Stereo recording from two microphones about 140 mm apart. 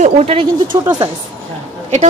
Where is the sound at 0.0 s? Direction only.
50° right (ahead or behind).